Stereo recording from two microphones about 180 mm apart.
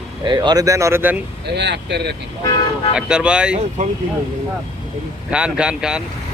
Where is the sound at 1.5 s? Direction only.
70° right (ahead or behind).